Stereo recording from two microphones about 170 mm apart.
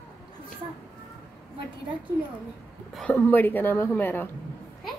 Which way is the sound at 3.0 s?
10° left (ahead or behind).